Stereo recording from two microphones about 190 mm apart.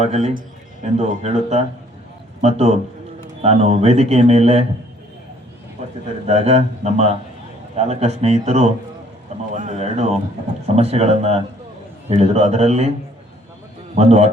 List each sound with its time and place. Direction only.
0.0 s speech: 35° right (ahead or behind)
6.2 s speech: 35° right (ahead or behind)
13.9 s speech: 35° right (ahead or behind)